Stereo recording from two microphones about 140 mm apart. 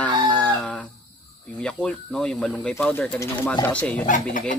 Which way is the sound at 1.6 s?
5° left (ahead or behind).